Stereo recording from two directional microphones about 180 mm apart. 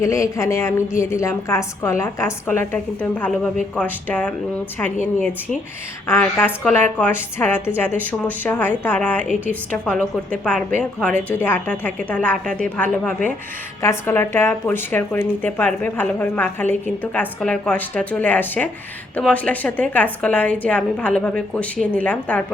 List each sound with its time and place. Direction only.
0.0 s speech: 15° left (ahead or behind)
6.1 s a woman's voice: 10° left (ahead or behind)